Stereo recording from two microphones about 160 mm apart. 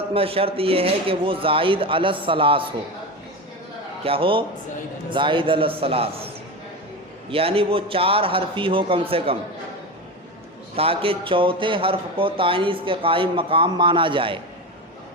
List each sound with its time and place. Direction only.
0.1 s a man's voice: 35° right (ahead or behind)
4.0 s a man's voice: 35° right (ahead or behind)
7.3 s a man's voice: 35° right (ahead or behind)
10.8 s a man's voice: 35° right (ahead or behind)